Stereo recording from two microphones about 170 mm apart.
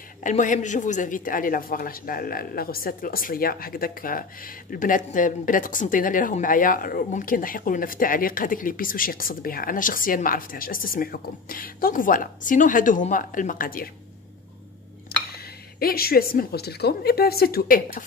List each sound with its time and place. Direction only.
0.2 s speech: 50° left (ahead or behind)
15.0 s speech: 60° left (ahead or behind)